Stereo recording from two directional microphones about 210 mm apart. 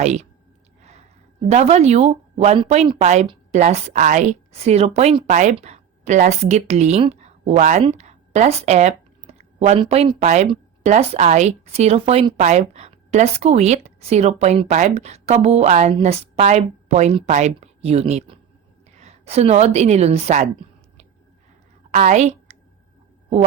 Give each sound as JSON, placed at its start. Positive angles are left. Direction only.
{"t": 0.0, "sound": "speech", "side_deg": -35}
{"t": 0.8, "sound": "a sound", "side_deg": -30}
{"t": 1.5, "sound": "a woman's voice", "side_deg": -30}
{"t": 21.9, "sound": "a woman's voice", "side_deg": -35}